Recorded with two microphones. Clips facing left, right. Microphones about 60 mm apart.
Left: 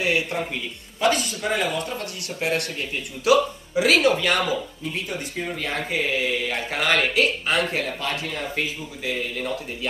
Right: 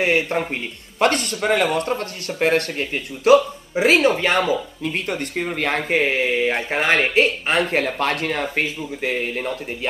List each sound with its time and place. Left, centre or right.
0.0 s speech: right
0.9 s speech: right
4.8 s speech: right
7.7 s speech: right